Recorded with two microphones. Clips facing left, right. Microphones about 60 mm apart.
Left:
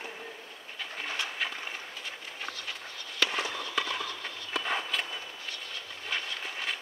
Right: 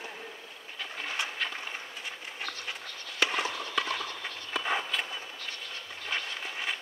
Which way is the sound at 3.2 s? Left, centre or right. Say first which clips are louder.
Right 1 dB; centre.